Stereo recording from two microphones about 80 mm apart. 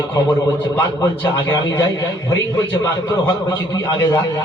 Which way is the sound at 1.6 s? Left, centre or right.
Left.